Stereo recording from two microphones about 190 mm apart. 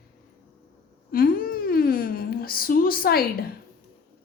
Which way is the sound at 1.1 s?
50° left (ahead or behind).